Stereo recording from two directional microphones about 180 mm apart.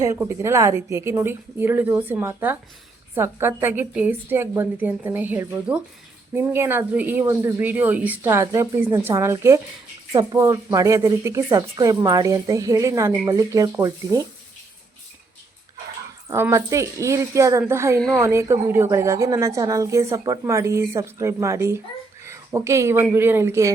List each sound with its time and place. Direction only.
0.0 s speech: 15° right (ahead or behind)
16.3 s speech: 15° right (ahead or behind)